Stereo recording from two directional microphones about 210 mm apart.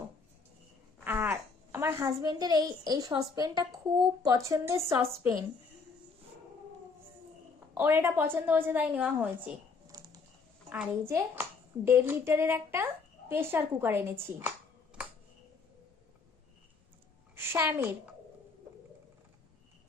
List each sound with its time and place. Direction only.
0.9 s a child's voice: 10° right (ahead or behind)
7.7 s a child's voice: 10° right (ahead or behind)
9.9 s a sound: 15° right (ahead or behind)
10.7 s a child's voice: 10° right (ahead or behind)
17.3 s a woman's voice: 10° right (ahead or behind)